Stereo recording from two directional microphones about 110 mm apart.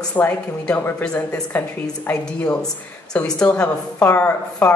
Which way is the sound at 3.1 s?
10° left (ahead or behind).